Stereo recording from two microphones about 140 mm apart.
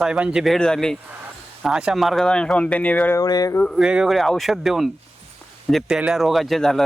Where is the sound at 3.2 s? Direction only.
25° left (ahead or behind).